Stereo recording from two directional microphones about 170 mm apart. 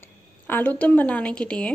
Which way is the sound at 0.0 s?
10° left (ahead or behind).